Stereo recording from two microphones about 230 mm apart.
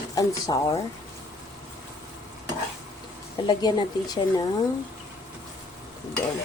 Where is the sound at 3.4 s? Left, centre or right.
Centre.